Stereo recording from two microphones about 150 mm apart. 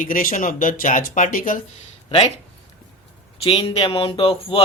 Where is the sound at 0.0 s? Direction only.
65° left (ahead or behind).